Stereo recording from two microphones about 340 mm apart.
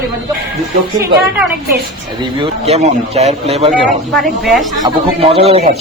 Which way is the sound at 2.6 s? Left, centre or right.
Centre.